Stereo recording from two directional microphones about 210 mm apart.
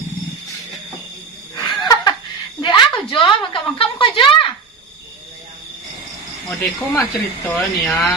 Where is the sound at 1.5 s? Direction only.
15° left (ahead or behind).